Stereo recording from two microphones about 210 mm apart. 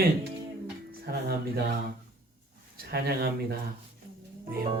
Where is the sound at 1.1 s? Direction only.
45° right (ahead or behind).